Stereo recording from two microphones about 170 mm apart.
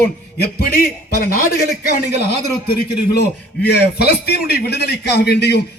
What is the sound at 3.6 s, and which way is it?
A man's voice, 70° left (ahead or behind).